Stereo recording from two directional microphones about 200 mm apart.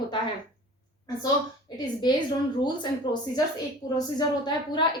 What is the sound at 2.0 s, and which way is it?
A woman's voice, 20° left (ahead or behind).